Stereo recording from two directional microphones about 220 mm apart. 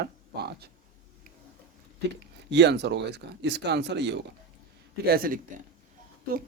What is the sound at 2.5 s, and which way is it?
Speech, 50° right (ahead or behind).